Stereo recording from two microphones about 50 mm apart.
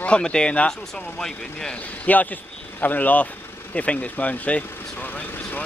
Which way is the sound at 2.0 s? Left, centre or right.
Left.